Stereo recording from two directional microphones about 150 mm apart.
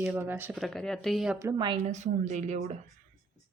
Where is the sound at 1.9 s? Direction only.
50° right (ahead or behind).